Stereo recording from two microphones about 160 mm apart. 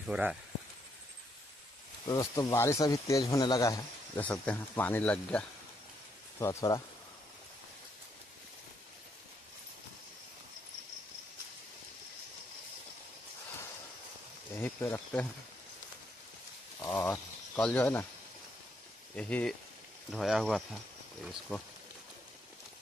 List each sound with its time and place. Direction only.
0.0 s speech: 5° right (ahead or behind)
2.0 s speech: 20° left (ahead or behind)
4.2 s speech: 10° left (ahead or behind)
6.4 s speech: 20° left (ahead or behind)
14.5 s speech: 15° left (ahead or behind)
16.8 s speech: 10° left (ahead or behind)
19.1 s speech: 5° left (ahead or behind)